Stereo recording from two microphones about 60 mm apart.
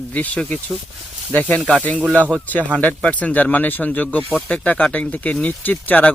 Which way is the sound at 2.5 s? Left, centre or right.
Left.